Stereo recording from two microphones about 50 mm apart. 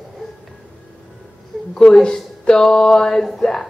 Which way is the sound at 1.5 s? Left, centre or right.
Centre.